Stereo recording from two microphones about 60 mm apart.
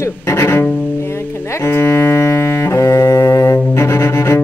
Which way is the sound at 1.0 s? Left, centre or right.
Left.